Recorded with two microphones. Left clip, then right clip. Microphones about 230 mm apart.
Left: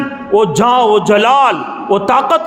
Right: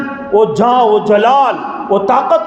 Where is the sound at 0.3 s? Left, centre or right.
Left.